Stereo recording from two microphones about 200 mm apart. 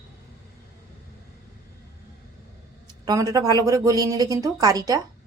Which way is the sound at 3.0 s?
20° right (ahead or behind).